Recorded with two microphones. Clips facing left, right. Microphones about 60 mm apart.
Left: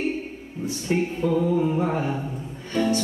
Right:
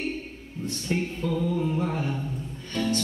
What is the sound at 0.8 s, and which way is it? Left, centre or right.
Music, centre.